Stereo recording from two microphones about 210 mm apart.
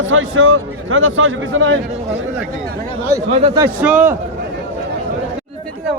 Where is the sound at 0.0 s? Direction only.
70° right (ahead or behind).